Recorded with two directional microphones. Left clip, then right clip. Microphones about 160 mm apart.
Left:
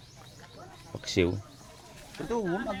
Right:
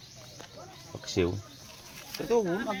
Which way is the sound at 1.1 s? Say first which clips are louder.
Left 2 dB; 35° left (ahead or behind).